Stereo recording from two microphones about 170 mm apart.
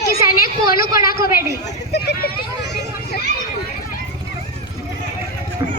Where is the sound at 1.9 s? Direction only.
75° left (ahead or behind).